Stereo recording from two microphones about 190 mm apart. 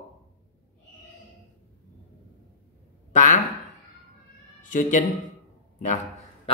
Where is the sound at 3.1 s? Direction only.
40° left (ahead or behind).